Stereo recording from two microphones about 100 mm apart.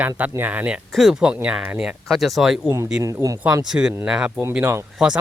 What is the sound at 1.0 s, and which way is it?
Speech, centre (ahead or behind).